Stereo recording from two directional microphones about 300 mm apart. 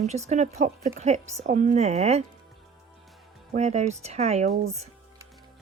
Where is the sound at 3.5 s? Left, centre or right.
Right.